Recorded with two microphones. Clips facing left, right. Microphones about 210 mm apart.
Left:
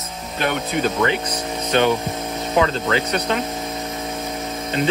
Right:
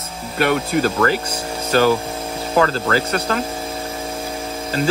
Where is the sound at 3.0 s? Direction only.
30° right (ahead or behind).